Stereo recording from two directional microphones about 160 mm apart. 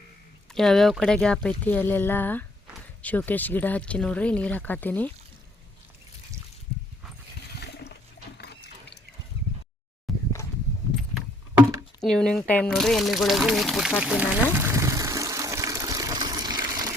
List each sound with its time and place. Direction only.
0.5 s speech: centre (ahead or behind)
8.4 s water: 90° left
9.4 s a sound: 90° right
10.1 s a sound: centre (ahead or behind)
11.9 s speech: 5° left (ahead or behind)
14.0 s water: 10° right (ahead or behind); by 16.9 s 25° right (ahead or behind)